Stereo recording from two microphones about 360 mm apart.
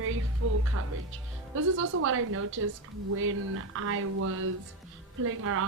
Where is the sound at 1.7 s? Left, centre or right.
Right.